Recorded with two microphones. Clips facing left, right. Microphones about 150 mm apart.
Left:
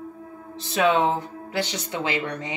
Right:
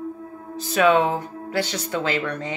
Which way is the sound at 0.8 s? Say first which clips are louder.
Right 3 dB; 60° right (ahead or behind).